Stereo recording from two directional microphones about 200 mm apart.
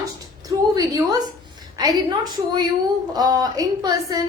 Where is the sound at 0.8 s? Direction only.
15° right (ahead or behind).